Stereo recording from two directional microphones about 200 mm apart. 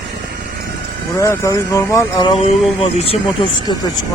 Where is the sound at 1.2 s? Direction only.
15° left (ahead or behind).